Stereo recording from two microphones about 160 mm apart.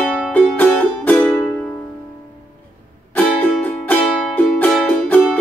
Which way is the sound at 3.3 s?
10° left (ahead or behind).